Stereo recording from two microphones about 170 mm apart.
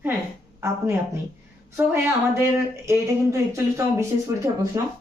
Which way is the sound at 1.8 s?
15° right (ahead or behind).